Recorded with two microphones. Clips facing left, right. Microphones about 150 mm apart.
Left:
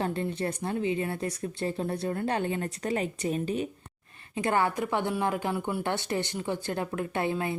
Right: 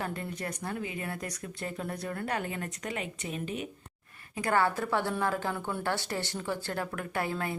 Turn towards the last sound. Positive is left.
turn(degrees=20)  # may be behind; listen again after turning